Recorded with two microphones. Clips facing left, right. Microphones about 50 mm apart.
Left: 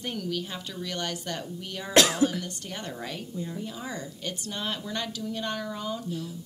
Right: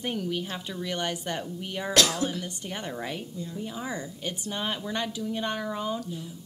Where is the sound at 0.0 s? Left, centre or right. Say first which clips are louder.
Right 2 dB; centre.